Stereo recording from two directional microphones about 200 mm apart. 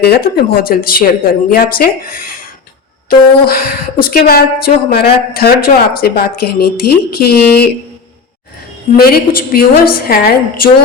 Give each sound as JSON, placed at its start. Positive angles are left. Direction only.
{"t": 0.0, "sound": "a woman's voice", "side_deg": 50}
{"t": 9.0, "sound": "a woman's voice", "side_deg": 50}